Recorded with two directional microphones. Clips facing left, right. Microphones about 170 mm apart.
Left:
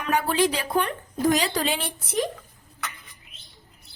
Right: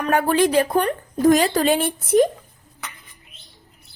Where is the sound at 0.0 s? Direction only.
50° right (ahead or behind).